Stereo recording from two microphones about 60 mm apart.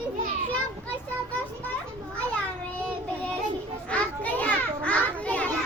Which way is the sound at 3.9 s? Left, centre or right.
Left.